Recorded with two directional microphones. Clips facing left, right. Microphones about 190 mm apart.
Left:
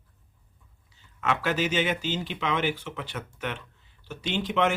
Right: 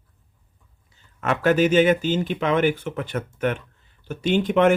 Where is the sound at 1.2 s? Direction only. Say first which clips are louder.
Right 8 dB; 50° right (ahead or behind).